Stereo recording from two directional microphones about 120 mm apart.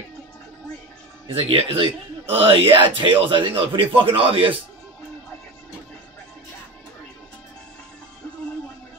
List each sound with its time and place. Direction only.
1.2 s speech: 50° right (ahead or behind)